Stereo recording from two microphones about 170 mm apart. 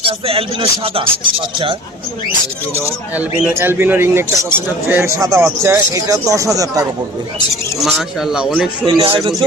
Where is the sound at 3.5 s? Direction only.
15° right (ahead or behind).